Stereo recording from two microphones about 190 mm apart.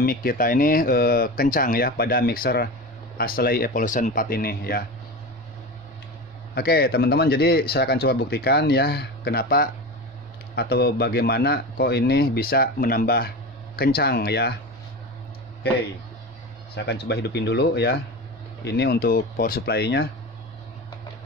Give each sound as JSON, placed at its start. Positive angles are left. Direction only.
{"t": 0.0, "sound": "speech", "side_deg": 50}
{"t": 6.5, "sound": "speech", "side_deg": 55}
{"t": 16.7, "sound": "speech", "side_deg": 60}